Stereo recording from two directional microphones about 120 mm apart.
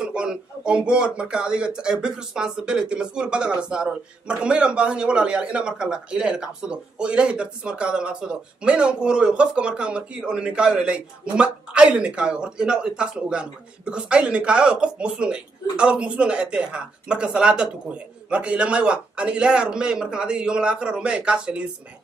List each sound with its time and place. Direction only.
0.0 s speech: 5° right (ahead or behind)